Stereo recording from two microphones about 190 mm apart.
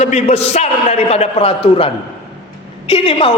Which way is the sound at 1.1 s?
30° left (ahead or behind).